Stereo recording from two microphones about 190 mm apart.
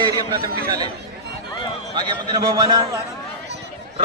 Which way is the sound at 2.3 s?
20° right (ahead or behind).